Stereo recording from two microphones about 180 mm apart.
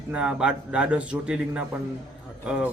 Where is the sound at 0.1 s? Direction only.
5° right (ahead or behind).